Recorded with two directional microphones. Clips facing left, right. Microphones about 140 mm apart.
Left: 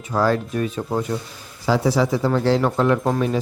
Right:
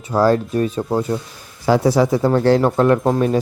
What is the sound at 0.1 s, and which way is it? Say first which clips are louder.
Speech: right 4 dB; 35° right (ahead or behind).